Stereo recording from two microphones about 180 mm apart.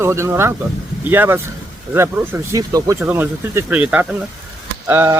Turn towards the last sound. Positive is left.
turn(degrees=-15)  # may be behind; listen again after turning